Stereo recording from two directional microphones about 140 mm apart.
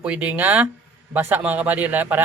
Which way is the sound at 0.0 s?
10° right (ahead or behind).